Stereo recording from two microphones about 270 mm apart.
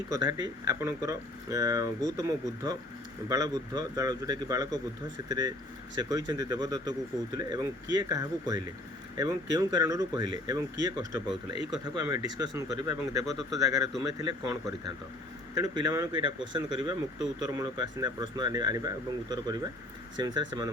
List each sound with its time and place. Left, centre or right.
0.1 s speech: centre
13.2 s speech: centre
13.6 s speech: centre